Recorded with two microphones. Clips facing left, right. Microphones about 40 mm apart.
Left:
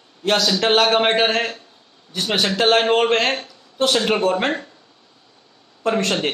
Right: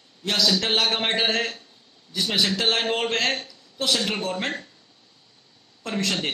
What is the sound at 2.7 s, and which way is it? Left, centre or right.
Speech, left.